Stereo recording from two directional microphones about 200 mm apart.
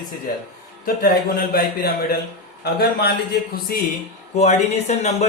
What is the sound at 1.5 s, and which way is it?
Speech, 50° left (ahead or behind).